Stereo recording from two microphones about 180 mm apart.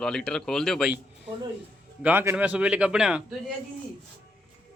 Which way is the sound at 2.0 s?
15° right (ahead or behind).